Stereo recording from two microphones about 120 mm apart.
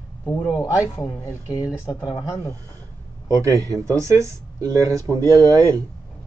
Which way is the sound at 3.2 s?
30° right (ahead or behind).